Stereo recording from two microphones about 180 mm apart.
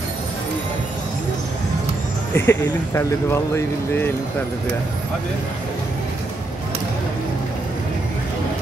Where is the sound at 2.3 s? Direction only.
15° left (ahead or behind).